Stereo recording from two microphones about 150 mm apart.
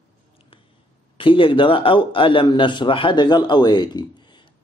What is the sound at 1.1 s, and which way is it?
A man's voice, 35° left (ahead or behind).